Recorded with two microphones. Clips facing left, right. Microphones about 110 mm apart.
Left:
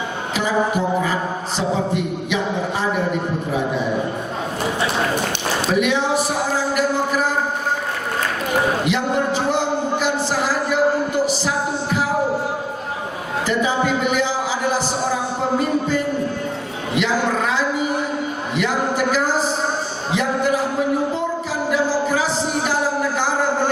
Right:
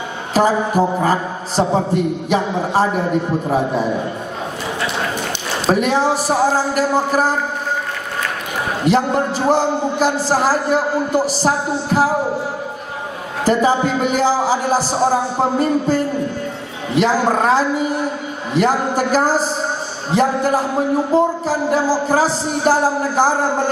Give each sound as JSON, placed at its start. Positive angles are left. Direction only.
{"t": 0.3, "sound": "a man's voice", "side_deg": -40}
{"t": 5.6, "sound": "a man's voice", "side_deg": -40}
{"t": 8.8, "sound": "a man's voice", "side_deg": -40}
{"t": 13.4, "sound": "a man's voice", "side_deg": -40}